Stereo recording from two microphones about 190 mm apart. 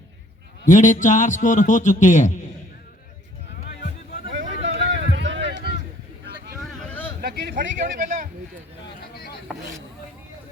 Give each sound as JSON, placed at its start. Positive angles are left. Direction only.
{"t": 0.6, "sound": "a man's voice", "side_deg": 40}
{"t": 4.3, "sound": "vehicle", "side_deg": -70}
{"t": 5.1, "sound": "run", "side_deg": -70}
{"t": 6.6, "sound": "vehicle", "side_deg": 5}
{"t": 7.2, "sound": "a sound", "side_deg": -50}